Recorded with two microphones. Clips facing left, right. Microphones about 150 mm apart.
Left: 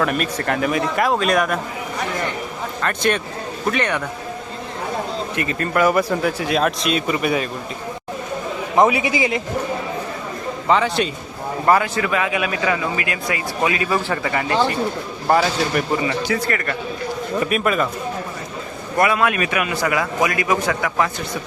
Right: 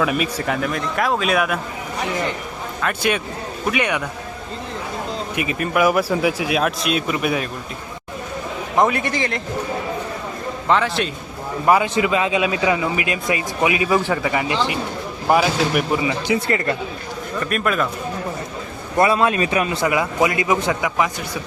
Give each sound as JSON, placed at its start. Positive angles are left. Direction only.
{"t": 0.0, "sound": "speech", "side_deg": -5}
{"t": 2.8, "sound": "speech", "side_deg": -5}
{"t": 5.4, "sound": "speech", "side_deg": -10}
{"t": 8.7, "sound": "speech", "side_deg": 5}
{"t": 10.7, "sound": "speech", "side_deg": 0}
{"t": 11.6, "sound": "speech", "side_deg": -15}
{"t": 16.5, "sound": "a man's voice", "side_deg": -25}
{"t": 17.4, "sound": "speech", "side_deg": 5}
{"t": 18.9, "sound": "a man's voice", "side_deg": -30}